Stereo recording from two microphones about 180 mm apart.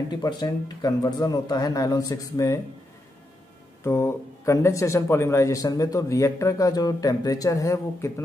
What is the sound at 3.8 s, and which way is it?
Speech, 15° left (ahead or behind).